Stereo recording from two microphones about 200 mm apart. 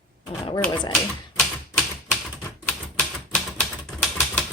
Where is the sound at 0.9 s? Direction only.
5° left (ahead or behind).